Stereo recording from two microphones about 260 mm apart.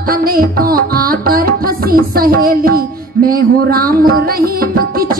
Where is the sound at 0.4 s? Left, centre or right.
Right.